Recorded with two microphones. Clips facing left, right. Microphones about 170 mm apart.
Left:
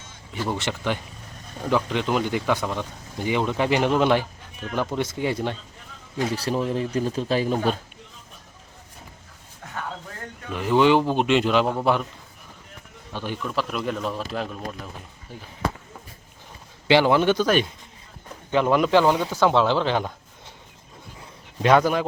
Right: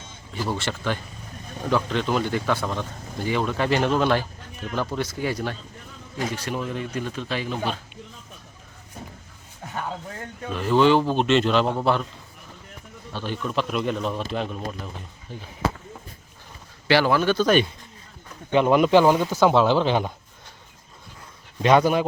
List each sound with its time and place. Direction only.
0.5 s speech: 15° left (ahead or behind)
6.3 s speech: 35° left (ahead or behind)
10.5 s speech: 15° left (ahead or behind)
13.1 s speech: 15° left (ahead or behind)
13.4 s speech: centre (ahead or behind)
15.3 s speech: 10° left (ahead or behind)
16.9 s speech: 20° left (ahead or behind)
17.4 s speech: 5° left (ahead or behind)
18.5 s speech: 10° right (ahead or behind)
21.8 s speech: 15° right (ahead or behind)